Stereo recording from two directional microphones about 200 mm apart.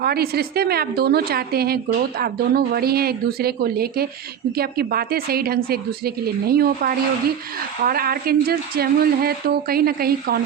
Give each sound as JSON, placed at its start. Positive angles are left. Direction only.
{"t": 0.0, "sound": "a woman's voice", "side_deg": -50}